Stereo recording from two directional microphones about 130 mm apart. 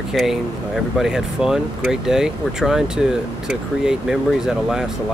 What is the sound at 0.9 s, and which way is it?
Speech, 5° right (ahead or behind).